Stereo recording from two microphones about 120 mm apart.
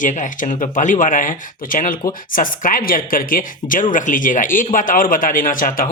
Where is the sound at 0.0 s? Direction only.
90° left.